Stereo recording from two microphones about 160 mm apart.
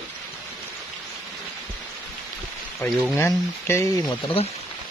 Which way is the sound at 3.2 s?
15° left (ahead or behind).